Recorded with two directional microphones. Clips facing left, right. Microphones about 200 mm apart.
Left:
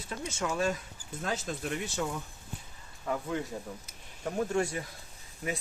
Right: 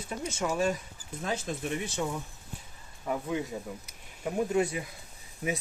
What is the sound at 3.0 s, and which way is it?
Speech, 15° right (ahead or behind).